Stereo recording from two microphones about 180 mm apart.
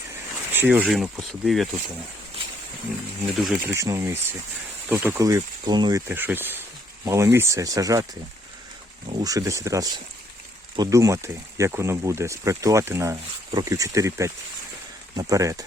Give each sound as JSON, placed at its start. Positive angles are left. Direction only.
{"t": 0.5, "sound": "speech", "side_deg": -10}
{"t": 3.4, "sound": "speech", "side_deg": -5}
{"t": 3.7, "sound": "speech", "side_deg": -15}
{"t": 6.1, "sound": "speech", "side_deg": -10}
{"t": 9.2, "sound": "speech", "side_deg": -20}